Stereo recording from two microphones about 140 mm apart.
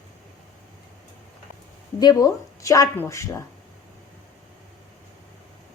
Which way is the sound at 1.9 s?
25° left (ahead or behind).